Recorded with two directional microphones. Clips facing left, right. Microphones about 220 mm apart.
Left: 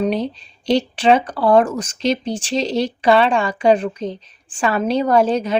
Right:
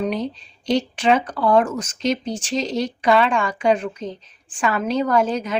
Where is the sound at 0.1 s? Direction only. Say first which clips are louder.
Left 3 dB; 30° left (ahead or behind).